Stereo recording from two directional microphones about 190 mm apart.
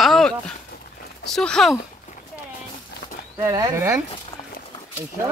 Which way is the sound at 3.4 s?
15° right (ahead or behind).